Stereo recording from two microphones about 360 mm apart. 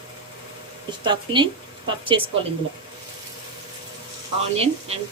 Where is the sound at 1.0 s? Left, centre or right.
Centre.